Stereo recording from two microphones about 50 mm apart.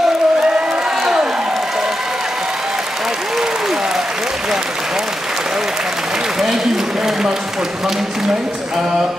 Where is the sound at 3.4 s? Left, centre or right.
Centre.